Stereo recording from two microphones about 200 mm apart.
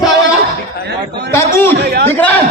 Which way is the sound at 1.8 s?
55° right (ahead or behind).